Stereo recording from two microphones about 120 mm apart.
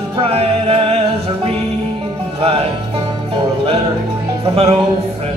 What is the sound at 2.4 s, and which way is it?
Music, 55° right (ahead or behind).